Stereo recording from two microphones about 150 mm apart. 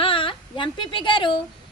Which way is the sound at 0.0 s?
35° left (ahead or behind).